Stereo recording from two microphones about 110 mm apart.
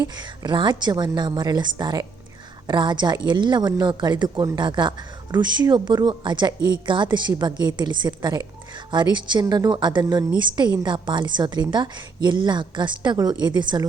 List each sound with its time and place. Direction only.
0.0 s a woman's voice: 40° right (ahead or behind)